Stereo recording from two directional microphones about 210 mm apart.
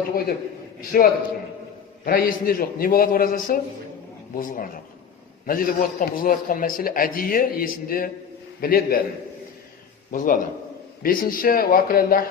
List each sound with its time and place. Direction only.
0.7 s a man's voice: 45° left (ahead or behind)
10.1 s a man's voice: 40° left (ahead or behind)